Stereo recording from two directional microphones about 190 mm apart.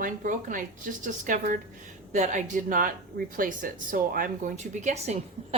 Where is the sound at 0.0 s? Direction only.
45° right (ahead or behind).